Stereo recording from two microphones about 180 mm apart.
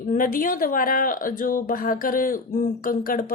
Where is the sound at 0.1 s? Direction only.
50° left (ahead or behind).